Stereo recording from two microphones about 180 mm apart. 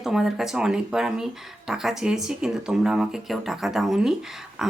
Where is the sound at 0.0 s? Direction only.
Centre (ahead or behind).